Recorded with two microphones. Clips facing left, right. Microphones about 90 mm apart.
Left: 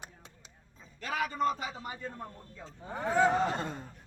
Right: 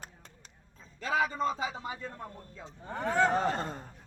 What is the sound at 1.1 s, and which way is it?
Speech, 20° right (ahead or behind).